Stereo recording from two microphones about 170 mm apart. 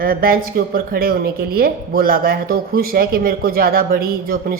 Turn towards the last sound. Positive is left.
turn(degrees=-60)  # may be behind; listen again after turning